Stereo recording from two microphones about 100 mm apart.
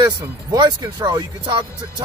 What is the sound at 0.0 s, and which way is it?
Speech, 40° right (ahead or behind).